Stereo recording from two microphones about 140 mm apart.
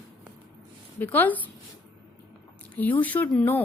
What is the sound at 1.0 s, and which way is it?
Speech, 15° left (ahead or behind).